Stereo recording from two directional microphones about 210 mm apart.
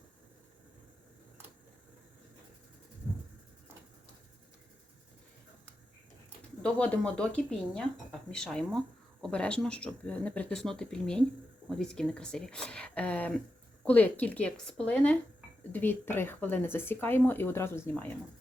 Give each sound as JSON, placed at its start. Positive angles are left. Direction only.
{"t": 6.6, "sound": "speech", "side_deg": 5}